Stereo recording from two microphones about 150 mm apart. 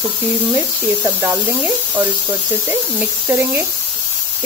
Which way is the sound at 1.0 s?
15° right (ahead or behind).